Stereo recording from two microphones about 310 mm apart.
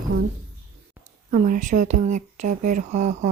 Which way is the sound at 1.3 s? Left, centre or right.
Right.